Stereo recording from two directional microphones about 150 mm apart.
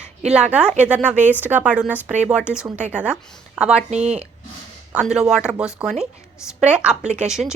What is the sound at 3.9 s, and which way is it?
Speech, 50° right (ahead or behind).